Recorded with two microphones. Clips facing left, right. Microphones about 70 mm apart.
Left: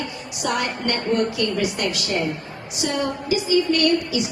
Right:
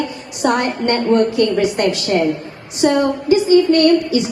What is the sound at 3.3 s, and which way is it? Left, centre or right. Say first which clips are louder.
Speech: right 9 dB; right.